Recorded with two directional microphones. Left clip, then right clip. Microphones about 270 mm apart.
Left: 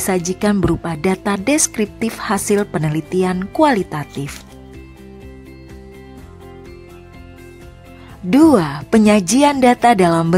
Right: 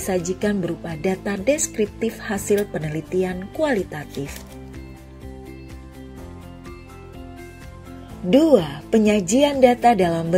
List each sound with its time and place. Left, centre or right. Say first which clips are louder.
0.3 s a woman's voice: left 6 dB; centre
8.3 s a woman's voice: left 3 dB; centre